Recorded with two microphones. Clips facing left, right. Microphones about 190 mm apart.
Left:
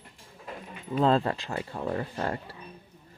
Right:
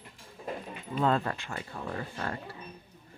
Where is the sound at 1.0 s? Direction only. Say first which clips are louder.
Left 4 dB; 30° left (ahead or behind).